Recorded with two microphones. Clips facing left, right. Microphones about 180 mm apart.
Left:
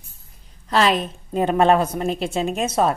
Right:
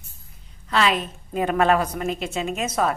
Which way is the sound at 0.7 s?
35° left (ahead or behind).